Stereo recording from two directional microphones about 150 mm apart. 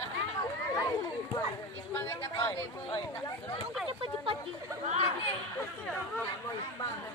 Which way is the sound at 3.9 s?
35° right (ahead or behind).